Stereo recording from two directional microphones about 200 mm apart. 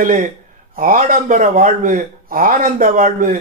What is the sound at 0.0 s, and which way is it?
Speech, 40° right (ahead or behind).